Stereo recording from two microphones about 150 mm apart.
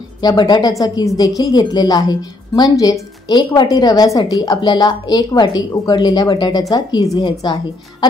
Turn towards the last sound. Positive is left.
turn(degrees=30)  # may be behind; listen again after turning